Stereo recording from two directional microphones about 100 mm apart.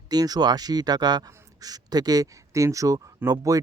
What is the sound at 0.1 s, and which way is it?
Speech, 40° right (ahead or behind).